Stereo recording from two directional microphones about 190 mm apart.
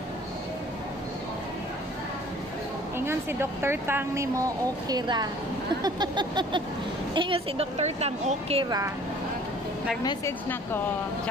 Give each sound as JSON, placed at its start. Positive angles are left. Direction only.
{"t": 3.1, "sound": "speech", "side_deg": -10}
{"t": 5.8, "sound": "a sound", "side_deg": -20}
{"t": 7.2, "sound": "a woman's voice", "side_deg": -30}
{"t": 8.6, "sound": "speech", "side_deg": -20}
{"t": 10.0, "sound": "a woman's voice", "side_deg": 15}